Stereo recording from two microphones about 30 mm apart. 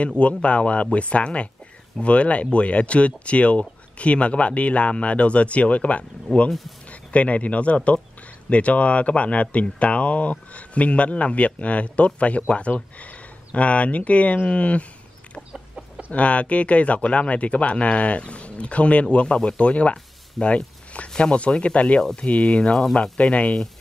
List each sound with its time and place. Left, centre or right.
0.0 s speech: left
16.1 s speech: left
20.5 s a sound: left
21.2 s speech: left
23.1 s speech: left